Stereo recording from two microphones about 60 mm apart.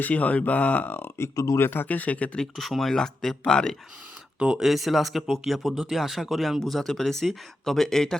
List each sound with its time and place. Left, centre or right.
0.0 s speech: left
1.2 s speech: left
1.5 s speech: left
1.9 s speech: left
2.6 s speech: centre
4.4 s speech: centre
4.6 s speech: centre